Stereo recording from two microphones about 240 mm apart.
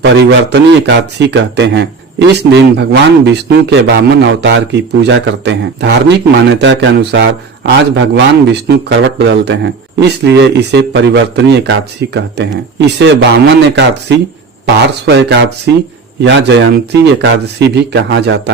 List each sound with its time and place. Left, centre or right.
0.0 s speech: right